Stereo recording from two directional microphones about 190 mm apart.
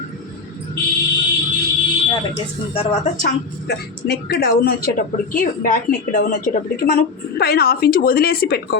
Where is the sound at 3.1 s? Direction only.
50° left (ahead or behind).